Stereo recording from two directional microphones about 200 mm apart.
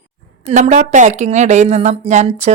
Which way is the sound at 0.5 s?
35° right (ahead or behind).